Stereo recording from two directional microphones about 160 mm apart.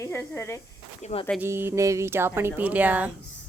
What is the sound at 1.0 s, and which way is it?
Speech, 40° left (ahead or behind).